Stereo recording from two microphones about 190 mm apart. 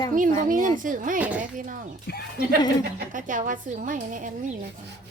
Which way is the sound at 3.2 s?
45° right (ahead or behind).